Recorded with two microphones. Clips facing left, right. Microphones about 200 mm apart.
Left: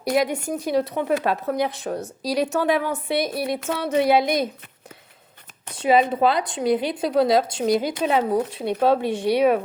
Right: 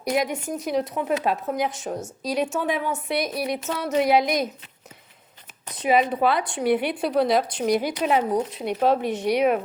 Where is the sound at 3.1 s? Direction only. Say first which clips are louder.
Left 3 dB; 30° left (ahead or behind).